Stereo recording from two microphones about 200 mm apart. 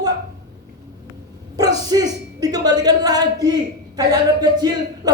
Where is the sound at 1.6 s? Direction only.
20° right (ahead or behind).